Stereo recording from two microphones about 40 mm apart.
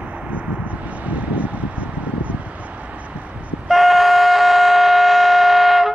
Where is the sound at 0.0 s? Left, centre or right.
Right.